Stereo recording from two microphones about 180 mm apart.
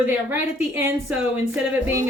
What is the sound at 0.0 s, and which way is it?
A woman's voice, 10° right (ahead or behind).